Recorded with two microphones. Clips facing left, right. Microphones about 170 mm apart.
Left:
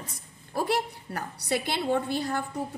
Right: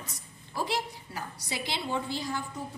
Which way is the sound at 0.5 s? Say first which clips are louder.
Left 5 dB; 60° left (ahead or behind).